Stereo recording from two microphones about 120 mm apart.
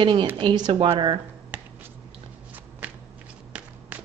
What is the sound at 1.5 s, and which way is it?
Finger snapping, 15° right (ahead or behind).